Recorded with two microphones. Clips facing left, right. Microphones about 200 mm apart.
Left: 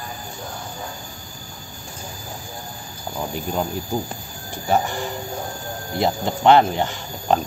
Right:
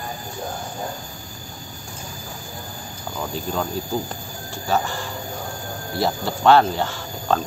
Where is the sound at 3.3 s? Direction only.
15° left (ahead or behind).